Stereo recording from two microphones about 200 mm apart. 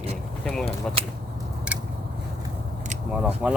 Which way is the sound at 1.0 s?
30° right (ahead or behind).